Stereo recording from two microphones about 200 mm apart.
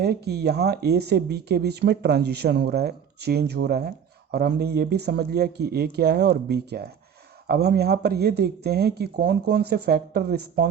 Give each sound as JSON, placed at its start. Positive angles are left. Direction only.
{"t": 0.0, "sound": "speech", "side_deg": -55}